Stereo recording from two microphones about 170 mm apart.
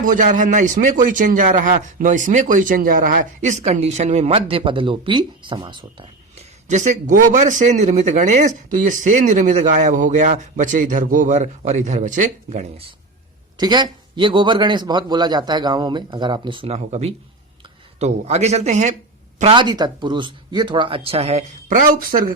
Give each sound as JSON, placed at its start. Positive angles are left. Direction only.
{"t": 0.0, "sound": "a man's voice", "side_deg": -50}
{"t": 6.7, "sound": "a man's voice", "side_deg": -45}
{"t": 13.6, "sound": "a man's voice", "side_deg": -25}
{"t": 19.4, "sound": "speech", "side_deg": -30}